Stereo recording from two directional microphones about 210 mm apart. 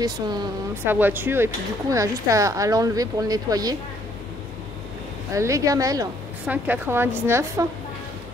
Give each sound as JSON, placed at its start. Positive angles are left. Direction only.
{"t": 0.0, "sound": "speech", "side_deg": -20}
{"t": 5.3, "sound": "speech", "side_deg": -15}